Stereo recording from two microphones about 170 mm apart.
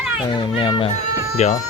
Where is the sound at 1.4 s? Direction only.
40° left (ahead or behind).